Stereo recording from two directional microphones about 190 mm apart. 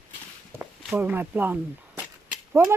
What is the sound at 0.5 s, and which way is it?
A woman's voice, 10° right (ahead or behind).